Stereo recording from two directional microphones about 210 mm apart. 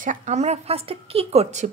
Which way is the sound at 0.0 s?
35° right (ahead or behind).